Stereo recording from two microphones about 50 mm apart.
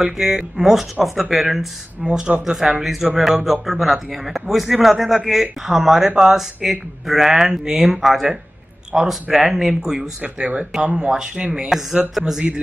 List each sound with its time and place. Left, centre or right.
0.0 s speech: centre
2.0 s speech: centre
2.8 s speech: centre
10.2 s speech: right
12.1 s speech: centre